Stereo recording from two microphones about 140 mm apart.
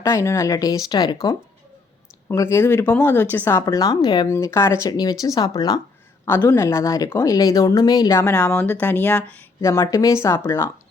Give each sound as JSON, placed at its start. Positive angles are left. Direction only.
{"t": 0.0, "sound": "speech", "side_deg": 20}
{"t": 4.3, "sound": "speech", "side_deg": 20}
{"t": 6.2, "sound": "speech", "side_deg": 15}
{"t": 9.6, "sound": "speech", "side_deg": 25}